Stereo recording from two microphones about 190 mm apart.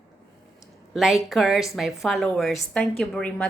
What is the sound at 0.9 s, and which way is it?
Speech, centre (ahead or behind).